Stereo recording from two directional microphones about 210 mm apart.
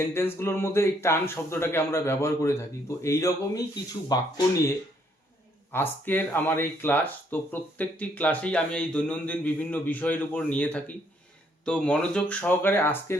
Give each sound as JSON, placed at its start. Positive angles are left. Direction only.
{"t": 0.0, "sound": "speech", "side_deg": 10}
{"t": 5.7, "sound": "speech", "side_deg": 10}